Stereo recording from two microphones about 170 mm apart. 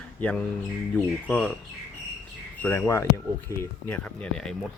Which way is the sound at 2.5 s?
10° left (ahead or behind).